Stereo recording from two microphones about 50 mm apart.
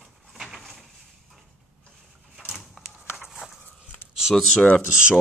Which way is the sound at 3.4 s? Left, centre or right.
Centre.